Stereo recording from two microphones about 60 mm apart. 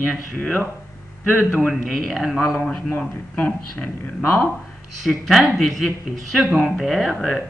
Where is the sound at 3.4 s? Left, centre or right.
Left.